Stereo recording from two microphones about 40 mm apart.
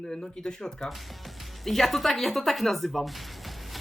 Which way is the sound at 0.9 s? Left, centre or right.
Centre.